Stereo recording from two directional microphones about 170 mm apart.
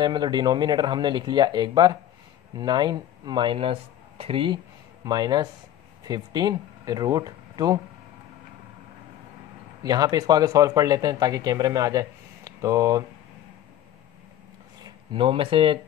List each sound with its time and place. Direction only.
0.0 s speech: 25° right (ahead or behind)
9.8 s speech: 20° right (ahead or behind)
14.8 s speech: 30° right (ahead or behind)